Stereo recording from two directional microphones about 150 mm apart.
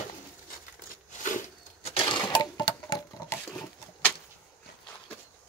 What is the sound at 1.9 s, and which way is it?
Sewing machine, 35° left (ahead or behind).